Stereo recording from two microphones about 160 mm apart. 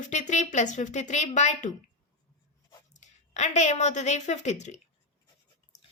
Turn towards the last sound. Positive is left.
turn(degrees=45)  # may be behind; listen again after turning